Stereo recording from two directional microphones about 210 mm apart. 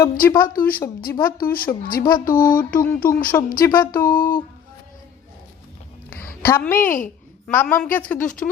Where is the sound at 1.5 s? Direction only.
45° left (ahead or behind).